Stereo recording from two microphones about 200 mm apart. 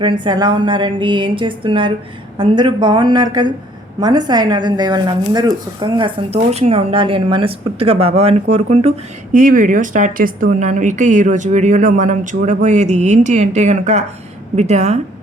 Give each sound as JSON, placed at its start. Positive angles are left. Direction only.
{"t": 0.0, "sound": "a woman's voice", "side_deg": -20}